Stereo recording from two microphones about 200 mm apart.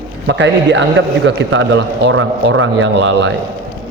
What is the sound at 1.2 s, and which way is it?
A man's voice, 70° right (ahead or behind).